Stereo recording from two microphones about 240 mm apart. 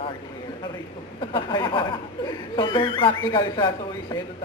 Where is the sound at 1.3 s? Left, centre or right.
Centre.